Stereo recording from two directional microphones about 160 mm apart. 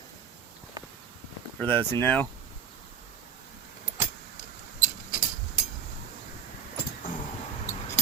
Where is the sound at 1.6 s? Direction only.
10° left (ahead or behind).